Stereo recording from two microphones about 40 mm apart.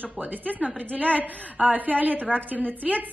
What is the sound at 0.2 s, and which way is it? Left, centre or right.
A woman's voice, right.